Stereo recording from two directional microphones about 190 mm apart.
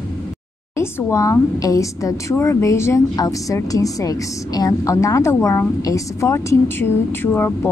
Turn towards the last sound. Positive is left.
turn(degrees=10)  # may be behind; listen again after turning